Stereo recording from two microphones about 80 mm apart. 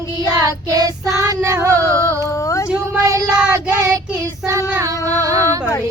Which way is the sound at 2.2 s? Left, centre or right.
Left.